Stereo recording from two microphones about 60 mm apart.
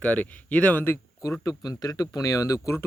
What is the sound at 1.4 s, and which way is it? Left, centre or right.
Speech, left.